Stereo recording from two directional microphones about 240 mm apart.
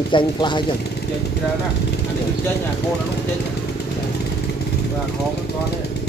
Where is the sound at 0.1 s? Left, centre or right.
Centre.